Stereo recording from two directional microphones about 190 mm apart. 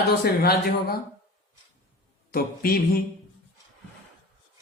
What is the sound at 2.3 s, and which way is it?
Speech, 50° left (ahead or behind).